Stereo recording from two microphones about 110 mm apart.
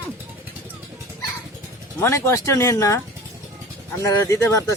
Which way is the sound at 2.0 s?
25° left (ahead or behind).